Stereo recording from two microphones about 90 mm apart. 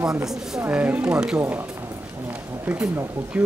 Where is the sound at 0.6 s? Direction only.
20° right (ahead or behind).